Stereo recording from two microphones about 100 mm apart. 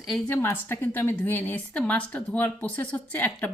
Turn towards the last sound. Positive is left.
turn(degrees=15)  # may be behind; listen again after turning